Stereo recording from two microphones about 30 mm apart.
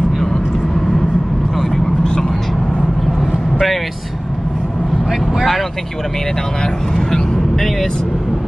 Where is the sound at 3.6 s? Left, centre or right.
Centre.